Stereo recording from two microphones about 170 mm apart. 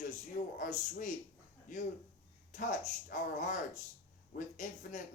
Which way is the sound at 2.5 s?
50° left (ahead or behind).